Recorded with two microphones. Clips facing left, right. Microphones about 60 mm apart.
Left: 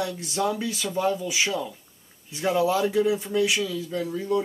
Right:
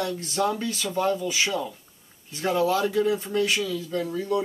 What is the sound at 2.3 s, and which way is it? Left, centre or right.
Speech, centre.